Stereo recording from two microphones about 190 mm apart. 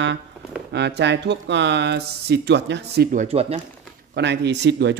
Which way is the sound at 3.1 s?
35° right (ahead or behind).